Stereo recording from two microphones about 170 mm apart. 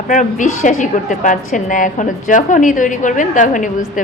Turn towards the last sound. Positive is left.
turn(degrees=50)  # may be behind; listen again after turning